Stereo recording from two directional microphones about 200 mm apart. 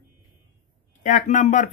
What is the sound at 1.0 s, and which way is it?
Speech, 35° left (ahead or behind).